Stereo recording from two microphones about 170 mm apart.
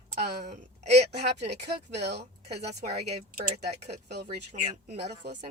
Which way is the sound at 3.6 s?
40° right (ahead or behind).